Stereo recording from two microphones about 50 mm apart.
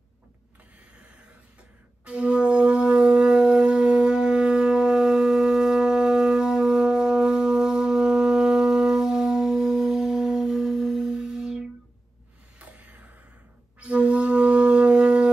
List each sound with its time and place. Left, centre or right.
2.0 s shofar: right
12.5 s a sound: right
13.7 s wind instrument: right